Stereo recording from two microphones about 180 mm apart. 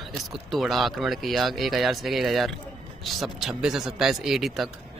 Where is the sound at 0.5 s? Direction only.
Centre (ahead or behind).